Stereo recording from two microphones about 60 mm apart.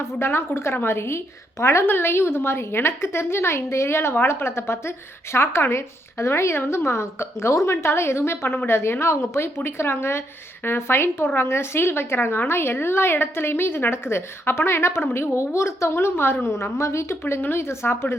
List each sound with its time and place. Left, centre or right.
0.0 s a woman's voice: left
1.9 s a woman's voice: left